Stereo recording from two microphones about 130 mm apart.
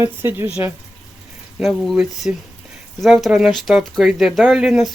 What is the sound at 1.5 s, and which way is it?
Speech, centre (ahead or behind).